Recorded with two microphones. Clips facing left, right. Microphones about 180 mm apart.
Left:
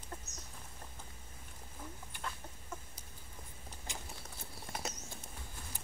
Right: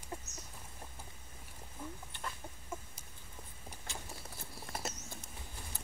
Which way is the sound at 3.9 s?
15° left (ahead or behind).